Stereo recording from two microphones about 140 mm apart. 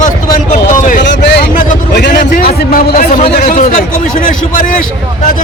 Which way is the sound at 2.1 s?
75° left (ahead or behind).